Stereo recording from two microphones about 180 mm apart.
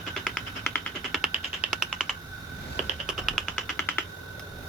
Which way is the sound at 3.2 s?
Centre (ahead or behind).